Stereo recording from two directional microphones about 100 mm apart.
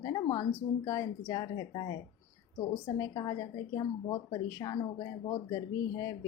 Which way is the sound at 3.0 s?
40° left (ahead or behind).